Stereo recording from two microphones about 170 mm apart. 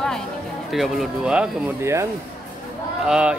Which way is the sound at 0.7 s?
Centre (ahead or behind).